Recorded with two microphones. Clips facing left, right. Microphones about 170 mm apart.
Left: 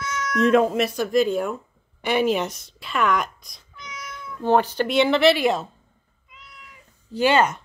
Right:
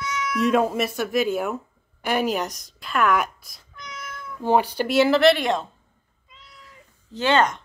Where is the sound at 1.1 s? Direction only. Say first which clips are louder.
Left 3 dB; 5° right (ahead or behind).